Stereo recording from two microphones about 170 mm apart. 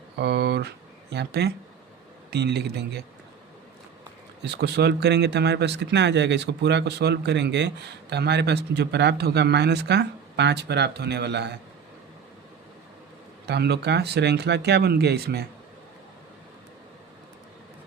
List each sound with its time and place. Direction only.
0.2 s speech: 80° right
4.4 s speech: 80° right
13.4 s speech: 75° right (ahead or behind)